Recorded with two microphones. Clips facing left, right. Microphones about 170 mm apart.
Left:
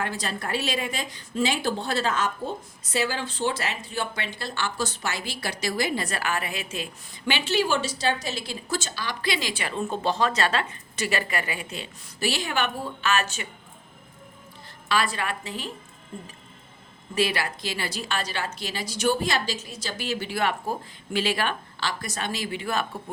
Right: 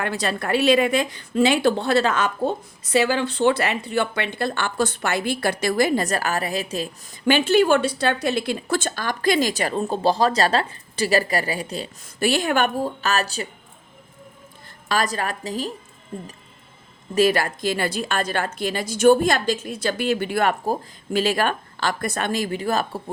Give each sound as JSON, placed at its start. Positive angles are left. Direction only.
{"t": 0.0, "sound": "a woman's voice", "side_deg": -65}
{"t": 12.2, "sound": "speech", "side_deg": -50}
{"t": 14.8, "sound": "a woman's voice", "side_deg": -40}
{"t": 17.2, "sound": "speech", "side_deg": -45}